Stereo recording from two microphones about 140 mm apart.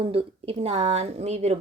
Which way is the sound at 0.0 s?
45° right (ahead or behind).